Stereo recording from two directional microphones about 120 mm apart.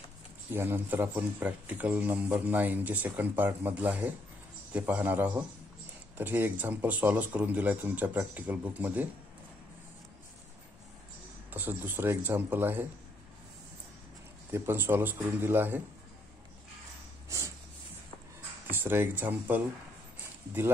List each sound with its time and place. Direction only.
0.5 s a man's voice: 20° right (ahead or behind)
11.5 s a man's voice: 15° right (ahead or behind)
14.5 s a man's voice: 20° right (ahead or behind)
18.7 s speech: 20° right (ahead or behind)